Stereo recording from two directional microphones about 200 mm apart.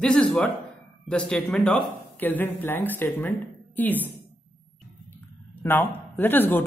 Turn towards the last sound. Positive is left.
turn(degrees=10)  # may be behind; listen again after turning